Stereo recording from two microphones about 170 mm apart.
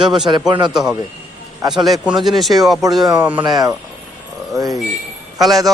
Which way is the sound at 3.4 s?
25° right (ahead or behind).